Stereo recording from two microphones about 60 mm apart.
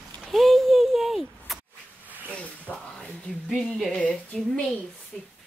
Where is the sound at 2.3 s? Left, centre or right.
Centre.